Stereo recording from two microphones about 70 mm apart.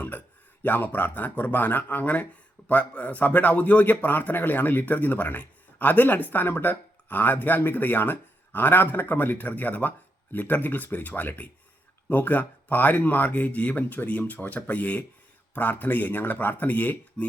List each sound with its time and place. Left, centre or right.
0.6 s speech: left